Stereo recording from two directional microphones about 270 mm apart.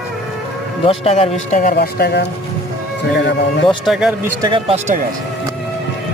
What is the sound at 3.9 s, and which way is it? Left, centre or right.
Speech, centre.